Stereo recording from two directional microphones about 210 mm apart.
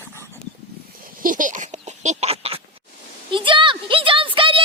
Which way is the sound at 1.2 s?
40° right (ahead or behind).